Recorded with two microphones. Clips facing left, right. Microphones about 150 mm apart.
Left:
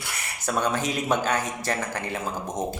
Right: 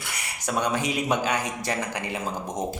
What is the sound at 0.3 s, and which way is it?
Speech, 15° right (ahead or behind).